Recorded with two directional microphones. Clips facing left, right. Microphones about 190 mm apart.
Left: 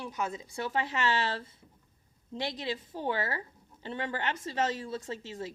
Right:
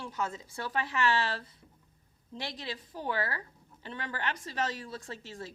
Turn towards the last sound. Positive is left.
turn(degrees=20)  # may be behind; listen again after turning